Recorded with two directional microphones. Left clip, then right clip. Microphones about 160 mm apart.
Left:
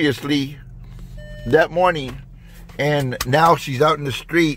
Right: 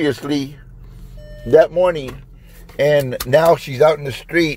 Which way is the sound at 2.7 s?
5° left (ahead or behind).